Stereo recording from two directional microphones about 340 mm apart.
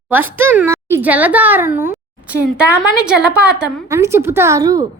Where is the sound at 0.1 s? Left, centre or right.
Centre.